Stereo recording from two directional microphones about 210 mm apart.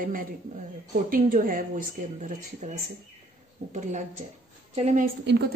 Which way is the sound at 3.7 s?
35° right (ahead or behind).